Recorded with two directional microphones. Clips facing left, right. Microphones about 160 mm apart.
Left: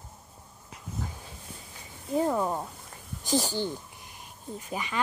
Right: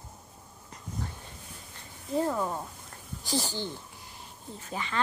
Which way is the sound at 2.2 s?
20° left (ahead or behind).